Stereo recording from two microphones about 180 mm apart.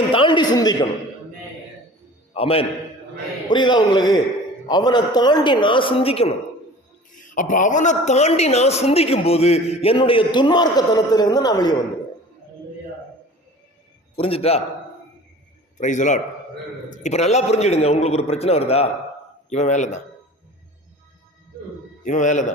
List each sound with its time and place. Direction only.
0.1 s a man's voice: 25° left (ahead or behind)
2.3 s a man's voice: 35° left (ahead or behind)
7.2 s a man's voice: 45° left (ahead or behind); by 11.8 s 20° left (ahead or behind)
14.2 s a man's voice: 30° left (ahead or behind)
15.8 s a man's voice: 45° left (ahead or behind)
22.0 s a man's voice: 45° left (ahead or behind)